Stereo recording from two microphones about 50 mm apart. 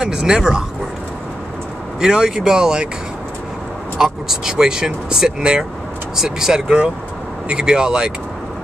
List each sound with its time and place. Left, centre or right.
0.0 s speech: centre
2.0 s speech: centre
4.0 s speech: centre